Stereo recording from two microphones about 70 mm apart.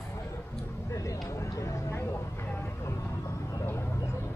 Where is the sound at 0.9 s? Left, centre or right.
Left.